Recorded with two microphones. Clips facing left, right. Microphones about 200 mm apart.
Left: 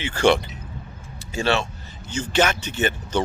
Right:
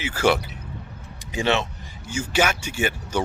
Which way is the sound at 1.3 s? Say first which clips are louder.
Even; 15° right (ahead or behind).